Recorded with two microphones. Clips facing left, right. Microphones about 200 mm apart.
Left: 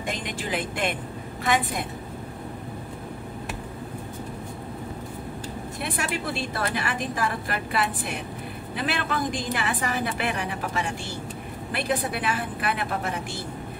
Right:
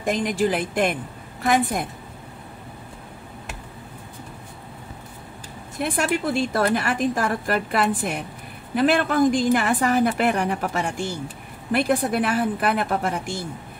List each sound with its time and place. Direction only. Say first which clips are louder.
0.0 s a woman's voice: right 10 dB; 45° right (ahead or behind)
5.8 s a woman's voice: right 8 dB; 50° right (ahead or behind)